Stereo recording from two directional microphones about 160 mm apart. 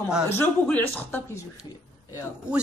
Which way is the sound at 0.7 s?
10° left (ahead or behind).